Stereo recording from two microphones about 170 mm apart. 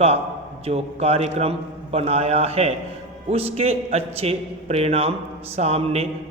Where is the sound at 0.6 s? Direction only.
35° right (ahead or behind).